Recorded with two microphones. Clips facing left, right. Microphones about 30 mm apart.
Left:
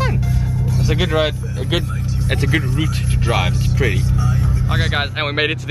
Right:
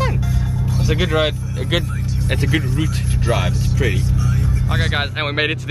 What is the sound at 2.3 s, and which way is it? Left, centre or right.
Speech, centre.